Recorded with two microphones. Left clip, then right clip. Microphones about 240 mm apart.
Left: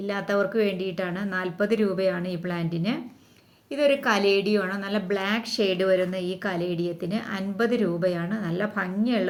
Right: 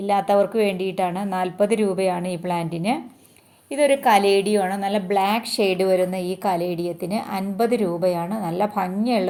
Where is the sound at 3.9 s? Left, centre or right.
Centre.